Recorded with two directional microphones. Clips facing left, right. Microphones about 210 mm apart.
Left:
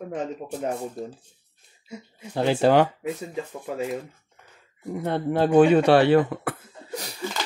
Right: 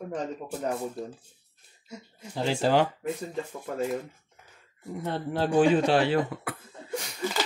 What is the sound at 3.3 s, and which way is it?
Speech, 5° left (ahead or behind).